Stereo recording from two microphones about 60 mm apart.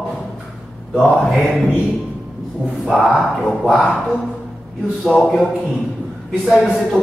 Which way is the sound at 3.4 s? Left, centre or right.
Centre.